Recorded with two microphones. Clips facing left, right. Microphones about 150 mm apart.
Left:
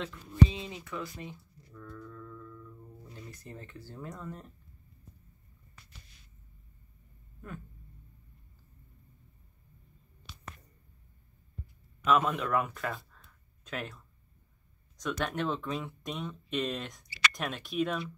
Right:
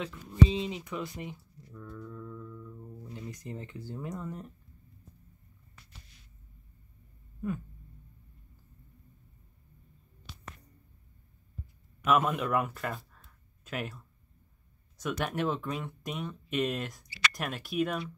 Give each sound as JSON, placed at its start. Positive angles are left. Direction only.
{"t": 0.5, "sound": "speech", "side_deg": -20}
{"t": 12.0, "sound": "speech", "side_deg": -5}
{"t": 15.0, "sound": "speech", "side_deg": -10}